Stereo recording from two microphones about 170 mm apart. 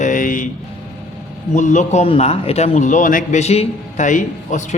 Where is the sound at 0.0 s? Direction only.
50° left (ahead or behind).